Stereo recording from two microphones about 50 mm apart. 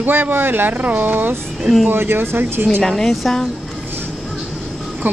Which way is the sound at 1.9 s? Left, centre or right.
Right.